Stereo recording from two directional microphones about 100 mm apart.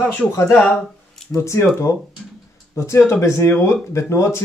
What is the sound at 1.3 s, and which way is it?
Speech, 30° left (ahead or behind).